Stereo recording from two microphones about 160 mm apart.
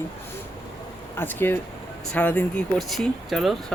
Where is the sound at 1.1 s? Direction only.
15° left (ahead or behind).